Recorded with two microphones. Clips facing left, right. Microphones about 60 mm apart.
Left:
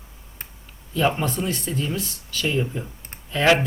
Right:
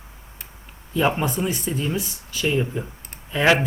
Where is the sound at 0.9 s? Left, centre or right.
Centre.